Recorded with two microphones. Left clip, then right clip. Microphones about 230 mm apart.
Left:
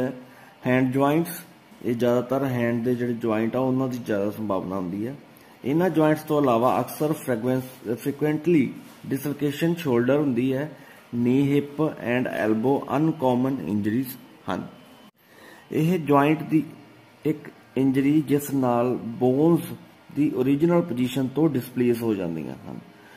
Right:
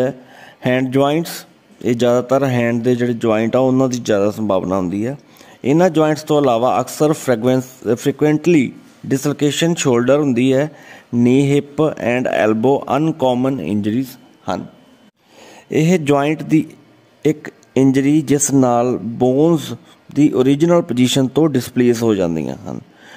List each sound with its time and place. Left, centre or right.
0.6 s speech: right
15.7 s speech: right